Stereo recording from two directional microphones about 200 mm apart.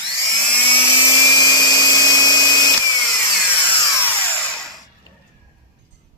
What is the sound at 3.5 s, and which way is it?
Tools, 10° left (ahead or behind).